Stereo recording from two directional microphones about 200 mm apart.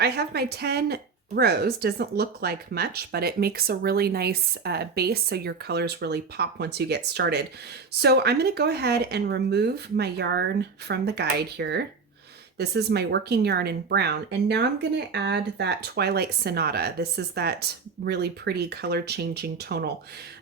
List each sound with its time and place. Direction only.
0.0 s speech: 55° right (ahead or behind)